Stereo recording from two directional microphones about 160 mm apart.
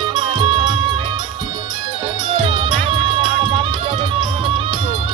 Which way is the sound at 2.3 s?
30° right (ahead or behind).